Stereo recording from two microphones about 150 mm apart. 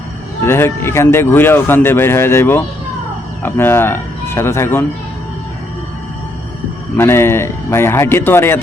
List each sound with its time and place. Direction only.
0.4 s speech: 15° left (ahead or behind)
6.9 s speech: 15° left (ahead or behind)